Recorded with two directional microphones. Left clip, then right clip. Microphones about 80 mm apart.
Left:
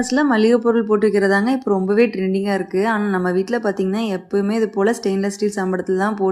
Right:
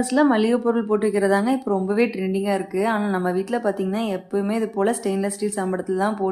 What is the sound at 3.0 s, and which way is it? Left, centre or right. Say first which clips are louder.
Speech: left 3 dB; centre.